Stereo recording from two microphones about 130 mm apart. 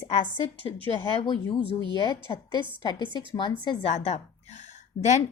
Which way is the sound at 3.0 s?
35° right (ahead or behind).